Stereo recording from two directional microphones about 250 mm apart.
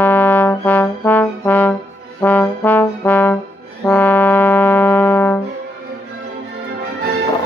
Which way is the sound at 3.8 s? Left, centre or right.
Centre.